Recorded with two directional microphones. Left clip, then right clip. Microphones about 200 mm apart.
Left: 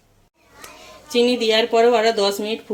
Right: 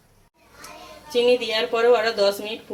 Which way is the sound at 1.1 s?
60° left (ahead or behind).